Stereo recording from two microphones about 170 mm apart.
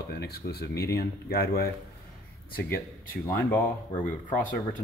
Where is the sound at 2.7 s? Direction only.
60° left (ahead or behind).